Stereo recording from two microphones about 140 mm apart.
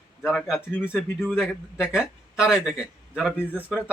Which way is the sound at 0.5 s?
15° left (ahead or behind).